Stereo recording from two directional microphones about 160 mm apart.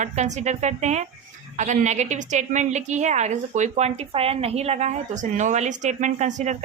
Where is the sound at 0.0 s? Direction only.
45° right (ahead or behind).